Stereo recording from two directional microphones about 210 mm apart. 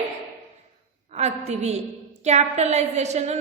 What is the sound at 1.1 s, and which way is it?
A woman's voice, 30° right (ahead or behind).